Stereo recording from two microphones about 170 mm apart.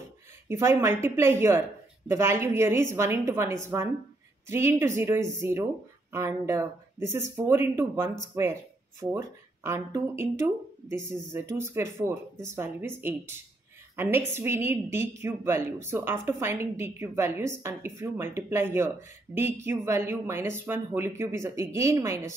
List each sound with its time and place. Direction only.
0.5 s a woman's voice: 15° right (ahead or behind)
9.7 s a woman's voice: 15° right (ahead or behind)